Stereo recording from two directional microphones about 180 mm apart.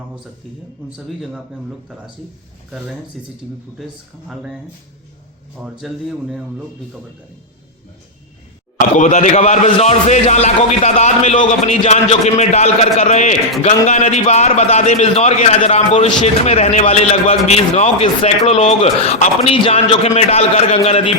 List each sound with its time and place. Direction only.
0.9 s speech: centre (ahead or behind)
5.6 s speech: centre (ahead or behind)
9.0 s a man's voice: 45° left (ahead or behind)